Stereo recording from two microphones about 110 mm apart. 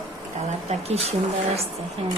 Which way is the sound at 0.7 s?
75° right (ahead or behind).